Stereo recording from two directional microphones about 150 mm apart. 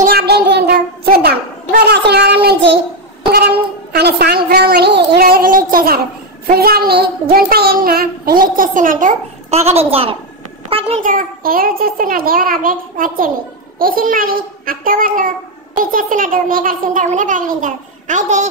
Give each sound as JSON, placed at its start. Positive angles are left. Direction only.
{"t": 0.0, "sound": "child singing", "side_deg": -85}
{"t": 3.3, "sound": "a woman's voice", "side_deg": -90}
{"t": 6.4, "sound": "a child's voice", "side_deg": -90}
{"t": 9.5, "sound": "a woman's voice", "side_deg": -45}
{"t": 11.0, "sound": "a child's voice", "side_deg": -65}